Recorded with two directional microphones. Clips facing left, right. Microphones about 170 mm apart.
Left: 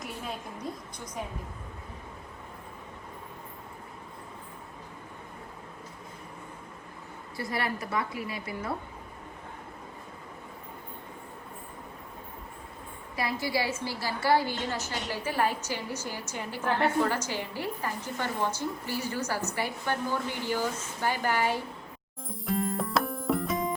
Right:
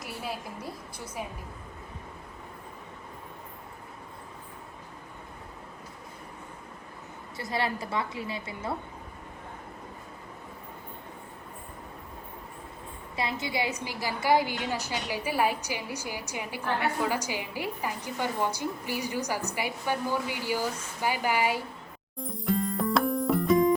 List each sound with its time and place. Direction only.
0.0 s a woman's voice: 5° right (ahead or behind)
7.3 s a woman's voice: 25° right (ahead or behind)
13.1 s a woman's voice: 20° right (ahead or behind)
22.2 s music: centre (ahead or behind)